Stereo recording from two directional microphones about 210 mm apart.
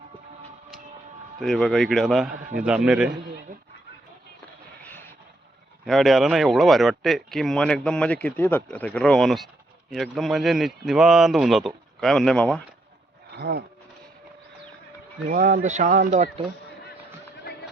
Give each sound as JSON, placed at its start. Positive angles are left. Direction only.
{"t": 1.4, "sound": "speech", "side_deg": 0}
{"t": 4.8, "sound": "a sound", "side_deg": 10}
{"t": 5.8, "sound": "speech", "side_deg": 0}
{"t": 13.3, "sound": "speech", "side_deg": -50}
{"t": 15.3, "sound": "speech", "side_deg": -40}